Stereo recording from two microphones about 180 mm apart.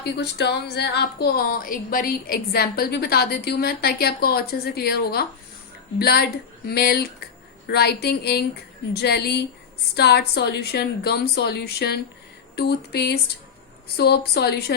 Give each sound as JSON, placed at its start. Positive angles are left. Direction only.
{"t": 0.0, "sound": "a woman's voice", "side_deg": 70}